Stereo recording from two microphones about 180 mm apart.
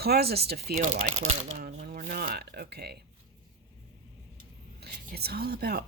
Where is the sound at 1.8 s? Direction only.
50° right (ahead or behind).